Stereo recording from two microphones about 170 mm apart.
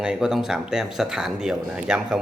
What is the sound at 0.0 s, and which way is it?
Speech, 5° right (ahead or behind).